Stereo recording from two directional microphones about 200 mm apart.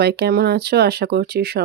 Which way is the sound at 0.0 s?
55° right (ahead or behind).